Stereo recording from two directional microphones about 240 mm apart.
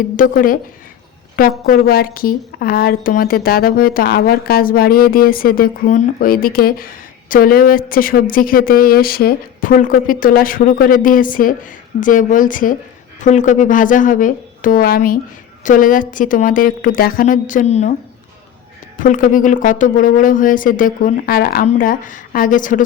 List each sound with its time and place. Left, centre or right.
0.2 s a woman's voice: left
18.9 s a woman's voice: left